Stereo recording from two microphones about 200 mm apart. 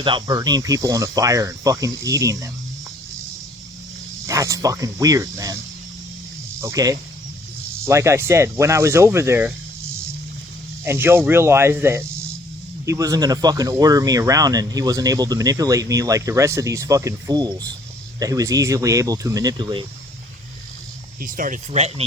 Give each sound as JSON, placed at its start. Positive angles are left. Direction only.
{"t": 0.0, "sound": "speech", "side_deg": -20}
{"t": 4.3, "sound": "speech", "side_deg": -15}
{"t": 6.6, "sound": "speech", "side_deg": -15}
{"t": 10.8, "sound": "speech", "side_deg": -10}
{"t": 21.2, "sound": "speech", "side_deg": -40}